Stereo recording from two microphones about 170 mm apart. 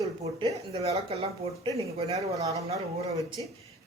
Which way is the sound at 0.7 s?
35° right (ahead or behind).